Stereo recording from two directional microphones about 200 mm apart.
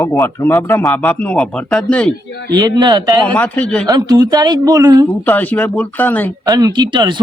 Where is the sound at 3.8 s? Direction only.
20° right (ahead or behind).